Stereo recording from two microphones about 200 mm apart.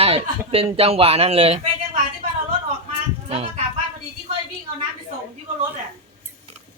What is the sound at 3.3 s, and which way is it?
Speech, 30° right (ahead or behind).